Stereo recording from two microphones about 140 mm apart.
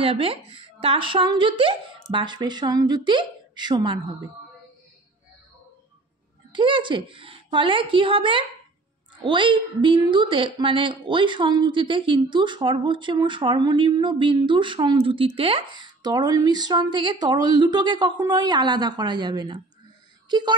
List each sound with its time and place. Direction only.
0.0 s a woman's voice: 40° right (ahead or behind)
6.5 s a woman's voice: 35° right (ahead or behind)